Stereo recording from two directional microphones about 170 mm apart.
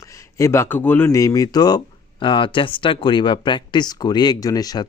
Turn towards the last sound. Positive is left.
turn(degrees=20)  # may be behind; listen again after turning